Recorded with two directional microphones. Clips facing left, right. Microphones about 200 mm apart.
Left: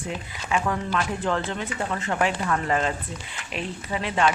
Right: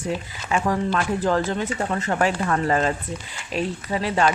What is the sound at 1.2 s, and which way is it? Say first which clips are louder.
Speech: right 5 dB; 40° right (ahead or behind).